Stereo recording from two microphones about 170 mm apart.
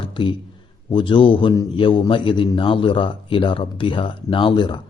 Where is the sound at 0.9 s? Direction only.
30° left (ahead or behind).